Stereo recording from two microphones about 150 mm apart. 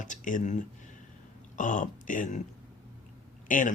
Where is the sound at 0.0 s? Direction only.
60° left (ahead or behind).